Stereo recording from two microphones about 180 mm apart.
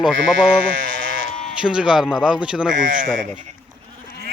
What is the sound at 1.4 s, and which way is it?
A man's voice, 5° right (ahead or behind).